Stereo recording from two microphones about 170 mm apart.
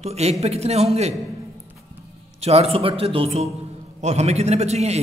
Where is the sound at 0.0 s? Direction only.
40° right (ahead or behind).